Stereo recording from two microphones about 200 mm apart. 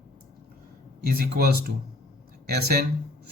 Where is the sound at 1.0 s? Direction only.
50° right (ahead or behind).